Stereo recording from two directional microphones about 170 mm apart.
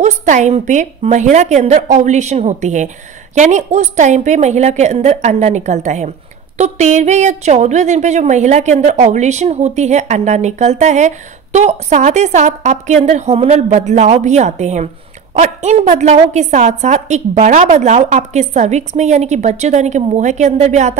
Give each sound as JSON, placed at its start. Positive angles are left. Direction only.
{"t": 0.0, "sound": "a woman's voice", "side_deg": -45}